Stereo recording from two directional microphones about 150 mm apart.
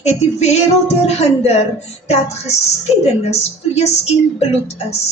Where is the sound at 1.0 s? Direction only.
45° left (ahead or behind).